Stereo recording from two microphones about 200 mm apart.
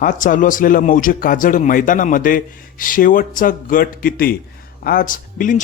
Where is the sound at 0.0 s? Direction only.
40° left (ahead or behind).